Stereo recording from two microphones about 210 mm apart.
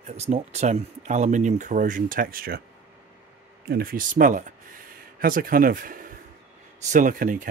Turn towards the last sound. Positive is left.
turn(degrees=-40)  # may be behind; listen again after turning